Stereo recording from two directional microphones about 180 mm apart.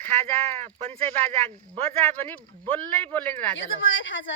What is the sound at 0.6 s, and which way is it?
Speech, 35° right (ahead or behind).